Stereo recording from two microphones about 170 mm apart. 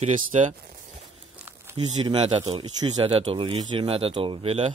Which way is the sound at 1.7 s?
35° right (ahead or behind).